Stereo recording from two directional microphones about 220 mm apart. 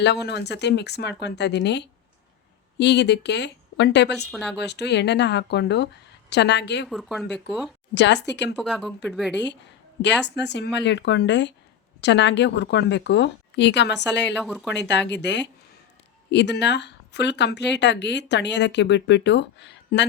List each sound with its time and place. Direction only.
0.0 s speech: 50° left (ahead or behind)
4.3 s speech: 5° left (ahead or behind)
4.5 s speech: 50° left (ahead or behind)
6.8 s speech: centre (ahead or behind)
7.9 s speech: 50° left (ahead or behind)
8.5 s speech: centre (ahead or behind)
9.3 s speech: 50° left (ahead or behind)
14.3 s speech: centre (ahead or behind)
14.8 s speech: 50° left (ahead or behind)